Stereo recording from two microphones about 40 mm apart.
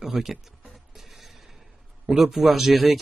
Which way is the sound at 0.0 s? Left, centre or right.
Centre.